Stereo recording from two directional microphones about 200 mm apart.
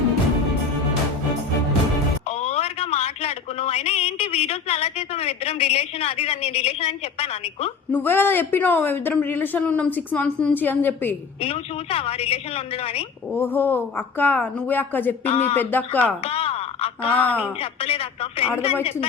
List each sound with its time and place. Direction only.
2.2 s a sound: 30° left (ahead or behind)
7.9 s speech: 10° left (ahead or behind)
11.3 s a woman's voice: 30° left (ahead or behind)
13.3 s speech: 10° left (ahead or behind)
15.2 s speech: 30° left (ahead or behind)
15.5 s speech: 10° left (ahead or behind)
16.2 s a sound: 30° left (ahead or behind)
17.1 s speech: 10° left (ahead or behind)
17.6 s a woman's voice: 30° left (ahead or behind)